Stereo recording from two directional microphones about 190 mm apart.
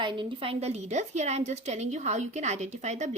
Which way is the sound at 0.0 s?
25° right (ahead or behind).